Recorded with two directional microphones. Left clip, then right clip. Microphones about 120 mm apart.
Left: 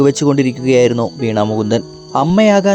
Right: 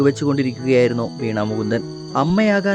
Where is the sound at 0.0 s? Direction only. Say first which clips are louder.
Left 6 dB; 40° left (ahead or behind).